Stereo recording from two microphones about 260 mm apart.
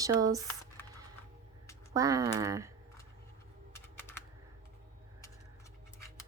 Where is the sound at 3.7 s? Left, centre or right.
Centre.